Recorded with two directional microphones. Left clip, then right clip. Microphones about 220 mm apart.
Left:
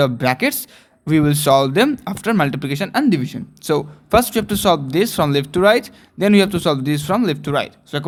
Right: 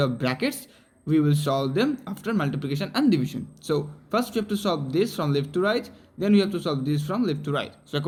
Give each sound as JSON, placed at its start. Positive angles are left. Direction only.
{"t": 0.0, "sound": "speech", "side_deg": 30}